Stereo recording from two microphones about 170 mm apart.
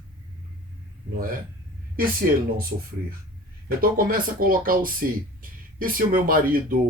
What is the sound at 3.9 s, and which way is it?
Speech, 60° right (ahead or behind).